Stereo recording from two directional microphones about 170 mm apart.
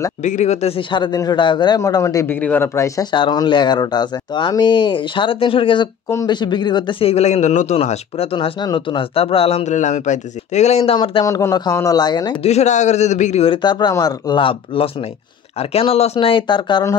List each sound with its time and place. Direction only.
0.2 s a man's voice: 45° left (ahead or behind); by 12.4 s 25° left (ahead or behind)
12.4 s a man's voice: 40° left (ahead or behind)